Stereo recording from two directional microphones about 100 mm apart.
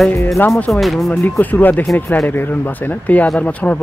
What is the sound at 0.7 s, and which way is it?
Speech, centre (ahead or behind).